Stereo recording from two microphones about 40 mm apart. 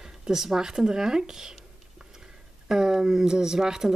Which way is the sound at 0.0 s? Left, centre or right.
Centre.